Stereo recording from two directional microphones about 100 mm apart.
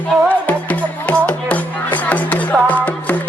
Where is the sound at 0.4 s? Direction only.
15° left (ahead or behind).